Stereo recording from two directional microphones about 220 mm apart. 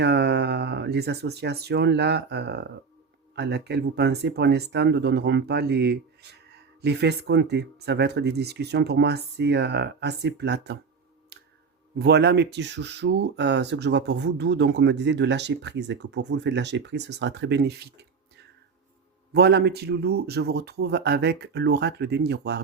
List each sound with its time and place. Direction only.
0.0 s speech: 50° right (ahead or behind)
11.9 s speech: 50° right (ahead or behind)
19.3 s speech: 50° right (ahead or behind)